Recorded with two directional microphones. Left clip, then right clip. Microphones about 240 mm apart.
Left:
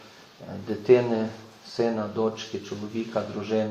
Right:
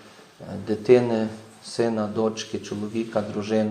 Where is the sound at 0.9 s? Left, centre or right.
Right.